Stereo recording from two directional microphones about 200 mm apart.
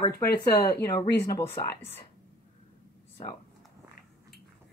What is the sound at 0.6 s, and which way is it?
Speech, 50° left (ahead or behind).